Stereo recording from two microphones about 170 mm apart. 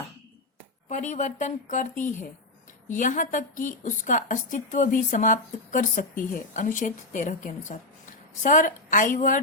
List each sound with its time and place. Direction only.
0.9 s a woman's voice: 45° left (ahead or behind)